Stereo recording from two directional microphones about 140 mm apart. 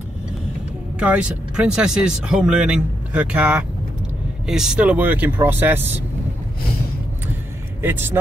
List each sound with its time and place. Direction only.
0.9 s speech: 10° right (ahead or behind)
7.8 s speech: 15° right (ahead or behind)